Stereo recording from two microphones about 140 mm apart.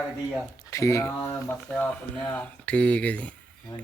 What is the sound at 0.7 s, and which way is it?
Speech, 20° left (ahead or behind).